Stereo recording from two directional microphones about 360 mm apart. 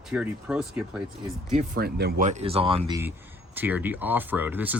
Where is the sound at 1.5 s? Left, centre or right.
Right.